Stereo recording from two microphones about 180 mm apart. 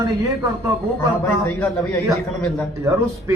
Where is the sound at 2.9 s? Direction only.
15° right (ahead or behind).